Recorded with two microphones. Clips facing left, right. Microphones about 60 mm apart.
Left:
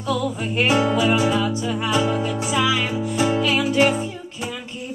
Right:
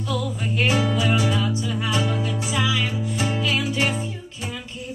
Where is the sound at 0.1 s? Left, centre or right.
Left.